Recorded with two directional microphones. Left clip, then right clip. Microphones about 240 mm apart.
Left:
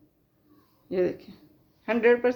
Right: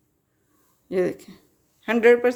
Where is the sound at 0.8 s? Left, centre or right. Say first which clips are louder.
Right 3 dB; right.